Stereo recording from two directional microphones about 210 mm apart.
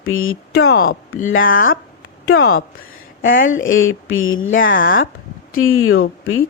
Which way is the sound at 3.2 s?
65° left (ahead or behind).